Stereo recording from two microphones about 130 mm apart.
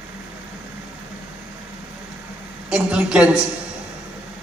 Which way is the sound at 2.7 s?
10° right (ahead or behind).